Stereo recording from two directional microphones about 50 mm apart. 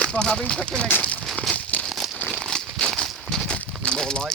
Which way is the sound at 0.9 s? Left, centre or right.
Left.